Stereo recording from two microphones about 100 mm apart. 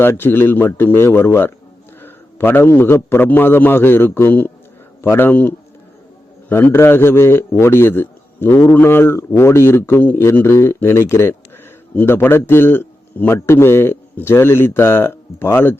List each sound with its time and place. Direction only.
0.0 s a man's voice: 20° left (ahead or behind)